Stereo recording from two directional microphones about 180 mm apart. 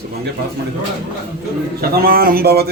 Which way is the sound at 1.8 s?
60° right (ahead or behind).